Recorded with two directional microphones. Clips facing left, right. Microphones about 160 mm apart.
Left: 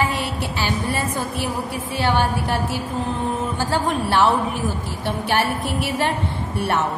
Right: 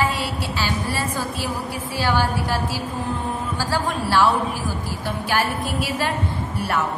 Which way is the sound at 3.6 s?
20° left (ahead or behind).